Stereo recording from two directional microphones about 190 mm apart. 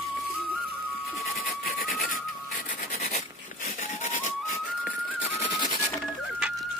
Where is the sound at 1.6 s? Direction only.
50° left (ahead or behind).